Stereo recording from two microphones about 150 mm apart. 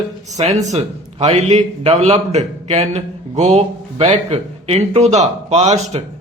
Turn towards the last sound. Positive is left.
turn(degrees=-45)  # may be behind; listen again after turning